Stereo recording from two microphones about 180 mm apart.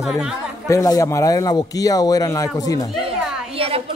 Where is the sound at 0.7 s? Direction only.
20° left (ahead or behind).